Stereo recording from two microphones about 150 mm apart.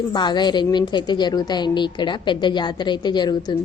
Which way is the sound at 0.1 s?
30° left (ahead or behind).